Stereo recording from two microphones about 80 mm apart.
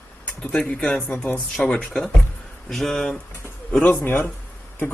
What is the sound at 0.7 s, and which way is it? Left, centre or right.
Speech, centre.